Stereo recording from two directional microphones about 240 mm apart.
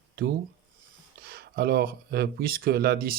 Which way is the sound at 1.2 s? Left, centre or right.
Right.